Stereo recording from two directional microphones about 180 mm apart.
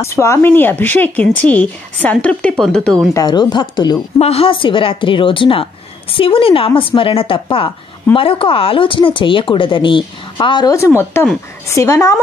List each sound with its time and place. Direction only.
0.0 s speech: 15° left (ahead or behind)
3.2 s speech: 25° left (ahead or behind)